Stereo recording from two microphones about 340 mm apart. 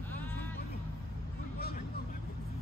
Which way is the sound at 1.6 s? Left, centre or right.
Left.